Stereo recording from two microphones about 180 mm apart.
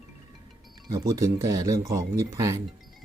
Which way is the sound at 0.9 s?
20° right (ahead or behind).